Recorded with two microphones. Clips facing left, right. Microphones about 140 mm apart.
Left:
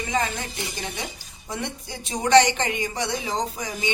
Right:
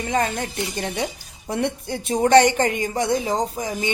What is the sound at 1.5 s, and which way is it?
Speech, 60° right (ahead or behind).